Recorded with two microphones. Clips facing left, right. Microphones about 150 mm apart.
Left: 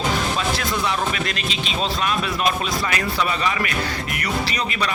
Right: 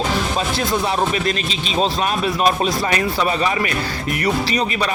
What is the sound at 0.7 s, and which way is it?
Speech, 35° right (ahead or behind).